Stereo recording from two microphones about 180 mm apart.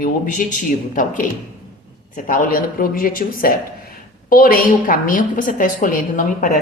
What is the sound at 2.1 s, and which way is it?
A woman's voice, 50° left (ahead or behind).